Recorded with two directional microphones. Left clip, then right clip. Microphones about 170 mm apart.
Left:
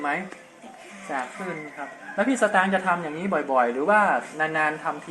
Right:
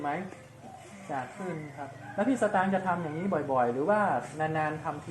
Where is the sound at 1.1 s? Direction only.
15° left (ahead or behind).